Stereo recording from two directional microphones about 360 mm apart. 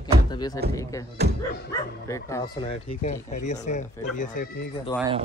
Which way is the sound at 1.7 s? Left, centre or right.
Centre.